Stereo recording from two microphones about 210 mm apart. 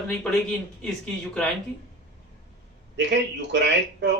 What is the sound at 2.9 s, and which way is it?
A man's voice, 55° right (ahead or behind).